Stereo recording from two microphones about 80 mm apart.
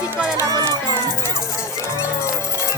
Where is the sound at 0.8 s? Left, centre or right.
Left.